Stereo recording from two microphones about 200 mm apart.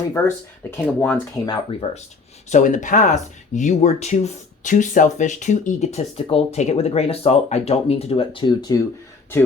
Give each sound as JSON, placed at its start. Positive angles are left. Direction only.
{"t": 0.1, "sound": "speech", "side_deg": 15}
{"t": 1.5, "sound": "speech", "side_deg": 30}